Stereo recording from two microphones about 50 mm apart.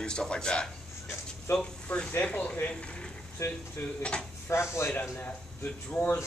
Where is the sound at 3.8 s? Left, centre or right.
Left.